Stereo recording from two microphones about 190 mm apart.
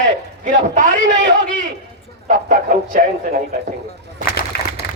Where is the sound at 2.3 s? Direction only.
45° right (ahead or behind).